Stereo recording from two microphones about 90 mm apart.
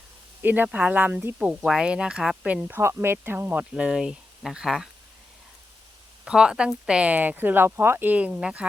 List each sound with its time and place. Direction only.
0.4 s speech: 20° right (ahead or behind)
1.6 s speech: 5° right (ahead or behind)
3.8 s speech: 10° right (ahead or behind)
6.2 s speech: 10° right (ahead or behind)